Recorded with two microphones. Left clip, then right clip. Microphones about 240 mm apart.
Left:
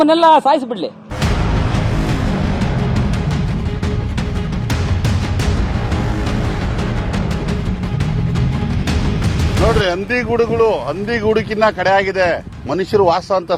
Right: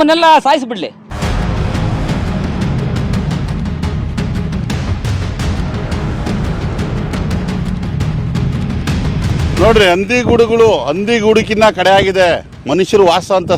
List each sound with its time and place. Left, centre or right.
0.0 s speech: right
9.8 s speech: right